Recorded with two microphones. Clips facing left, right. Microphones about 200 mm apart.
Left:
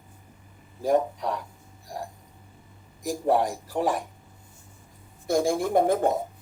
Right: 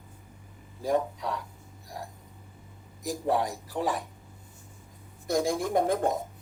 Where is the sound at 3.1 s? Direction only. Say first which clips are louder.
Left 4 dB; 45° left (ahead or behind).